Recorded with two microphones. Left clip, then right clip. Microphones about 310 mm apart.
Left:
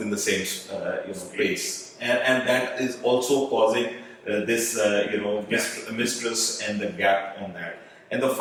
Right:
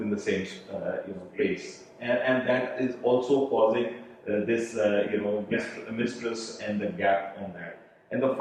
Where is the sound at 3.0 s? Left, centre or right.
Right.